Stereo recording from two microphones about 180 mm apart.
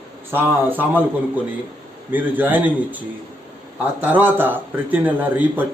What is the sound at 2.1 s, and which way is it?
Speech, 10° right (ahead or behind).